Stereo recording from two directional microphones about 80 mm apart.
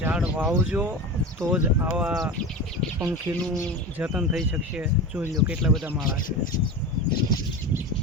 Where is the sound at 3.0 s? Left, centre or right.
Right.